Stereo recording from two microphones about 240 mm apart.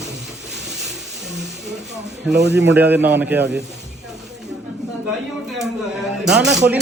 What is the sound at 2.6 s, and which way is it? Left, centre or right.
Speech, centre.